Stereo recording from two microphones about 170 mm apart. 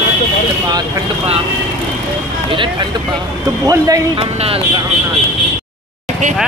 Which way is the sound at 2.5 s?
30° right (ahead or behind).